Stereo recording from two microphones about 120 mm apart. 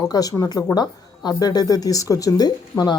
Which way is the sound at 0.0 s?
30° left (ahead or behind).